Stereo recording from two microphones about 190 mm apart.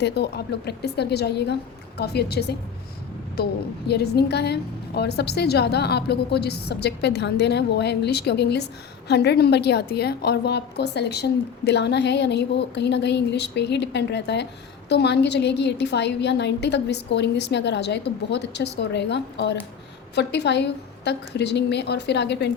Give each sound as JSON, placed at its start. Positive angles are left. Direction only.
{"t": 0.0, "sound": "a woman's voice", "side_deg": 60}
{"t": 3.8, "sound": "a woman's voice", "side_deg": 60}